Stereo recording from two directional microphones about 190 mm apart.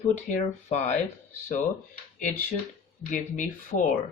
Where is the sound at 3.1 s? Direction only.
40° left (ahead or behind).